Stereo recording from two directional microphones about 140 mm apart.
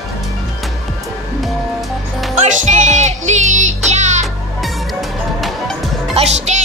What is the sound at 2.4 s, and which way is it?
Music, 60° right (ahead or behind).